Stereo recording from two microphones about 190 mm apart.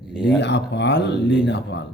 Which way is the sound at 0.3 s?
65° left (ahead or behind).